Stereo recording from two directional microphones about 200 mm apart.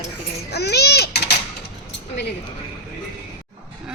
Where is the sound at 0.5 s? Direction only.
55° left (ahead or behind).